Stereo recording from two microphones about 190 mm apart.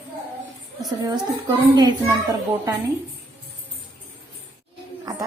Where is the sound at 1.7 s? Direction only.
20° right (ahead or behind).